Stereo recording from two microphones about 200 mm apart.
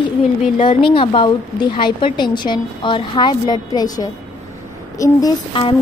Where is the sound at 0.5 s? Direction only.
25° left (ahead or behind).